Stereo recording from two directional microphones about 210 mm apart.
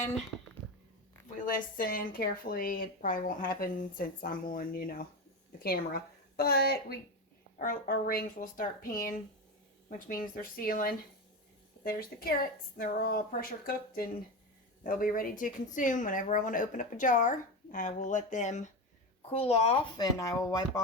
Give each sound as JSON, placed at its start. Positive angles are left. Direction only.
{"t": 1.5, "sound": "a woman's voice", "side_deg": 40}
{"t": 20.1, "sound": "speech", "side_deg": 15}